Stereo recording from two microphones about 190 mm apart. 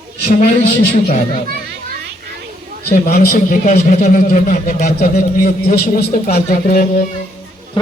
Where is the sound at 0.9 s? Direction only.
50° left (ahead or behind).